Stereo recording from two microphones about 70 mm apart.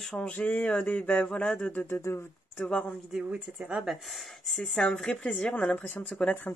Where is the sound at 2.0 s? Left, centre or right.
Left.